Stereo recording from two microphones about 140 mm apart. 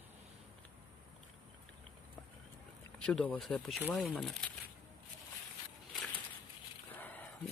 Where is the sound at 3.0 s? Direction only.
10° left (ahead or behind).